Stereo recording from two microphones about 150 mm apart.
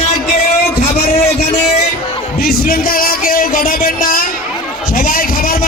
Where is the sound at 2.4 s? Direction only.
85° left.